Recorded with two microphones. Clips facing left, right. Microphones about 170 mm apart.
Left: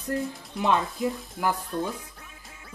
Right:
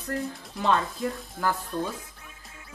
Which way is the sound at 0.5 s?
20° left (ahead or behind).